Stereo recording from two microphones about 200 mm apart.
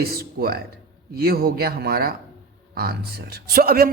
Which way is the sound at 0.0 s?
50° right (ahead or behind).